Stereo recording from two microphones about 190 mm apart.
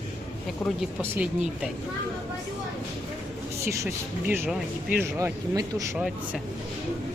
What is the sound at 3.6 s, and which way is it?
Speech, 15° right (ahead or behind).